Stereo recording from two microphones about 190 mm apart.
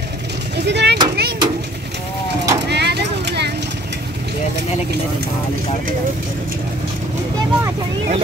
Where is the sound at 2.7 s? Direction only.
60° right (ahead or behind).